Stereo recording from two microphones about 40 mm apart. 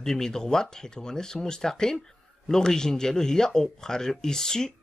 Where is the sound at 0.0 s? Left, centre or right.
Centre.